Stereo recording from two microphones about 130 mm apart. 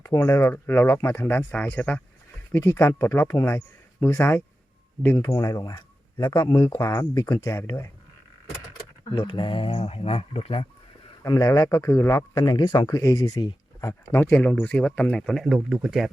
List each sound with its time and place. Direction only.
0.0 s speech: 25° left (ahead or behind)
5.1 s speech: 30° left (ahead or behind)
6.7 s speech: 20° left (ahead or behind)
9.1 s speech: 40° left (ahead or behind)
11.2 s speech: 25° left (ahead or behind); by 16.0 s 5° right (ahead or behind)